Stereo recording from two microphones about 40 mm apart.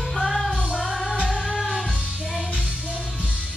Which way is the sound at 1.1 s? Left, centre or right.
Right.